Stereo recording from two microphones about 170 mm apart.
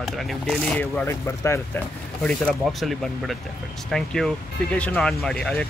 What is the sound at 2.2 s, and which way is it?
Speech, 5° left (ahead or behind).